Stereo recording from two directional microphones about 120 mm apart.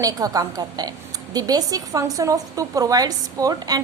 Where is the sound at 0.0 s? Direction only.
30° right (ahead or behind).